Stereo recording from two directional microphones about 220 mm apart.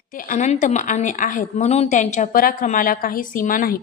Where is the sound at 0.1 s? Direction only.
40° left (ahead or behind).